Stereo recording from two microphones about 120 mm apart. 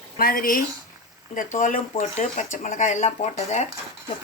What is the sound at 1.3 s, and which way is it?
Speech, 90° left.